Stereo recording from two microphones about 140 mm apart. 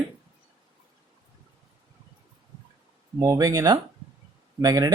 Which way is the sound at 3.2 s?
25° right (ahead or behind).